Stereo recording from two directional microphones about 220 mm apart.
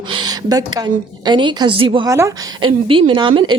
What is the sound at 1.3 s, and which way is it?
A woman's voice, 20° right (ahead or behind).